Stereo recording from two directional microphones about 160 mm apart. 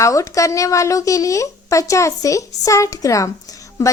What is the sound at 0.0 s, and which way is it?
Speech, 20° left (ahead or behind).